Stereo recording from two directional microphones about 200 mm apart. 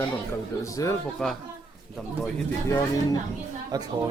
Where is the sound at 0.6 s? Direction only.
15° left (ahead or behind).